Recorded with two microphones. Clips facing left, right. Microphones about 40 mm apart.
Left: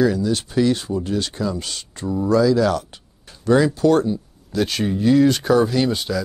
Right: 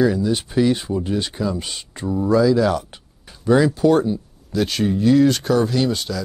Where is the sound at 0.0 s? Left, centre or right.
Centre.